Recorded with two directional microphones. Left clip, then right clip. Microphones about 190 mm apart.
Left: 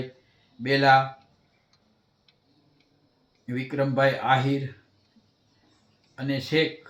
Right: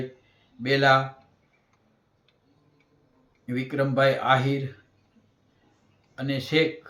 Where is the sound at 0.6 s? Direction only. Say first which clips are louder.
Left 1 dB; centre (ahead or behind).